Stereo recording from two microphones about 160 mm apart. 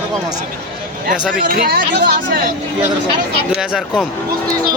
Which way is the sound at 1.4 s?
70° right (ahead or behind).